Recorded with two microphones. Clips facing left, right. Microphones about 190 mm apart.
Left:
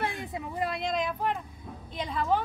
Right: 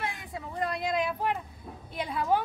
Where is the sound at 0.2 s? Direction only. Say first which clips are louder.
Left 4 dB; 20° left (ahead or behind).